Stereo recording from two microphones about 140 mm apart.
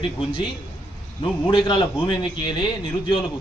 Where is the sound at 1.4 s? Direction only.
35° left (ahead or behind).